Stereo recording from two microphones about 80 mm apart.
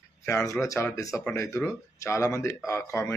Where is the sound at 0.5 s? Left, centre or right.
Left.